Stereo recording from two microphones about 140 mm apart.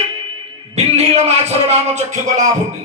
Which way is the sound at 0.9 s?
50° right (ahead or behind).